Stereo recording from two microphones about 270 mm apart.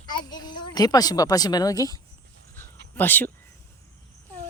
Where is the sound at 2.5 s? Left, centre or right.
Centre.